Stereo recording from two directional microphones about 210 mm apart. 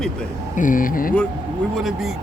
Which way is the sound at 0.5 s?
40° left (ahead or behind).